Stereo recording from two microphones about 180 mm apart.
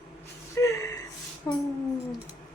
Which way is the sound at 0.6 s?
15° left (ahead or behind).